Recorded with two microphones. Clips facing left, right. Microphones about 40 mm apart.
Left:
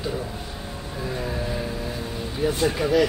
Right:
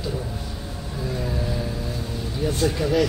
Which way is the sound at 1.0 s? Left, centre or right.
Centre.